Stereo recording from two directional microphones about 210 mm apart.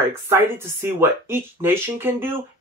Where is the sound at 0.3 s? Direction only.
10° right (ahead or behind).